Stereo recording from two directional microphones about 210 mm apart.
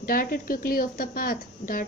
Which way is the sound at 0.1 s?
45° left (ahead or behind).